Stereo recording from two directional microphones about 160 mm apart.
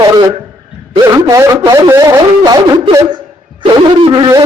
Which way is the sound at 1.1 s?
20° right (ahead or behind).